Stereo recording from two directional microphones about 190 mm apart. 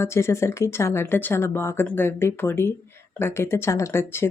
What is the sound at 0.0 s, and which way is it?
Speech, 15° left (ahead or behind).